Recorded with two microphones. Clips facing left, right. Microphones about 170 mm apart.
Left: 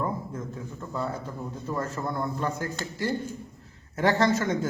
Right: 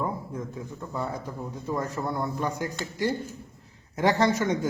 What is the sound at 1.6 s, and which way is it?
A man's voice, 15° right (ahead or behind).